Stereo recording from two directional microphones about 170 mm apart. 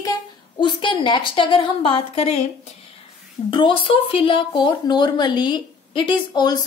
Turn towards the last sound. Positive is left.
turn(degrees=25)  # may be behind; listen again after turning